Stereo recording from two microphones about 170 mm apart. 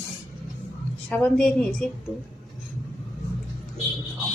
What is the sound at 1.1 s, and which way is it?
Speech, 5° left (ahead or behind).